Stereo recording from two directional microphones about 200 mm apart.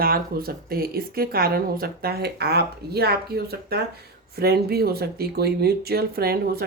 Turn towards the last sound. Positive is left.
turn(degrees=-50)  # may be behind; listen again after turning